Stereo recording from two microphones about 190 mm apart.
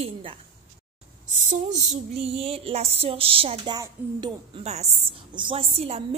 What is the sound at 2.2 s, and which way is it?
A woman's voice, 30° right (ahead or behind).